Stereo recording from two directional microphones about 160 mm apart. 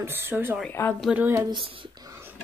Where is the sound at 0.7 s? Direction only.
15° left (ahead or behind).